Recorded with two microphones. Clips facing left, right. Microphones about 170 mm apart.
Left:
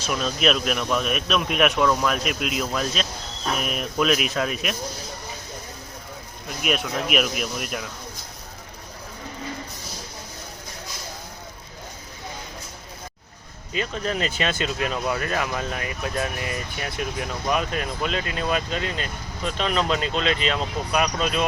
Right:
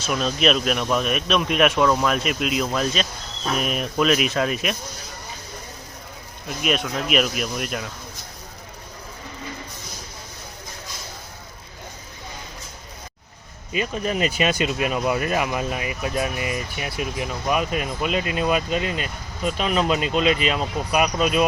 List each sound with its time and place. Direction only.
0.0 s speech: centre (ahead or behind)
6.6 s speech: 5° left (ahead or behind)
13.7 s speech: 10° right (ahead or behind)